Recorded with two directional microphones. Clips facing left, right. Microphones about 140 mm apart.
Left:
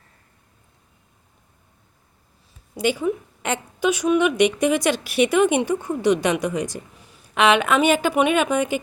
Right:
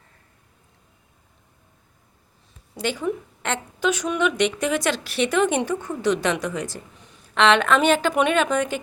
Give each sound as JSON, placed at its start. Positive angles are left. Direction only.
{"t": 2.7, "sound": "a woman's voice", "side_deg": 10}